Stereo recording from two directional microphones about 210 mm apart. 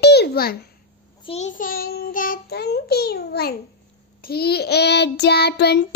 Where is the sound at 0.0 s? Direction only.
50° left (ahead or behind).